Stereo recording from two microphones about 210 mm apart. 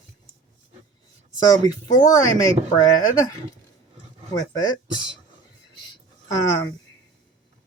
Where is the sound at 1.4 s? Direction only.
15° left (ahead or behind).